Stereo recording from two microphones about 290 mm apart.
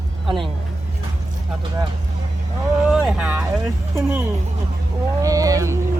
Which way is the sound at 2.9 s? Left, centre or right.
Centre.